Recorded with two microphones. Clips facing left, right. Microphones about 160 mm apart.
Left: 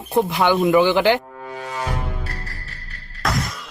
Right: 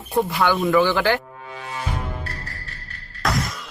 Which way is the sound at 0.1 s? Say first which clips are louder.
Left 2 dB; 20° left (ahead or behind).